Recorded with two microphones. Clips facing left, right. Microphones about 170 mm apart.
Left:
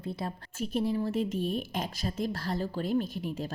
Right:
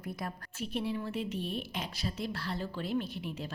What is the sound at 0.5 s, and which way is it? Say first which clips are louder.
A woman's voice: left 6 dB; 40° left (ahead or behind).